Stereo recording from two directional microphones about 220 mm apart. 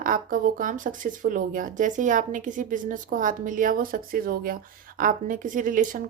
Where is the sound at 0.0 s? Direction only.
40° right (ahead or behind).